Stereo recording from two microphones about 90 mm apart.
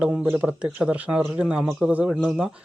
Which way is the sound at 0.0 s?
15° right (ahead or behind).